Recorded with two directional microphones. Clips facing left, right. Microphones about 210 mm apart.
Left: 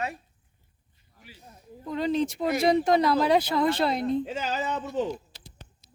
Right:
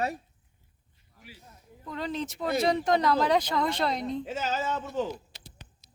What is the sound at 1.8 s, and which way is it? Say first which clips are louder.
Speech: left 7 dB; 15° left (ahead or behind).